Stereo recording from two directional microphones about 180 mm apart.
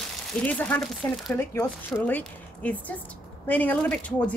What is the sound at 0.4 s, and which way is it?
Speech, 5° left (ahead or behind).